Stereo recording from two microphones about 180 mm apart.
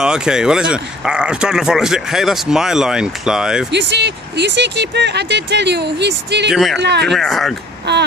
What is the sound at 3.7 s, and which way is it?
Speech, 75° right (ahead or behind).